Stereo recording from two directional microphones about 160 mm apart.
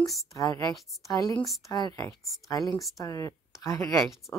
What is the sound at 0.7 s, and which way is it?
Speech, centre (ahead or behind).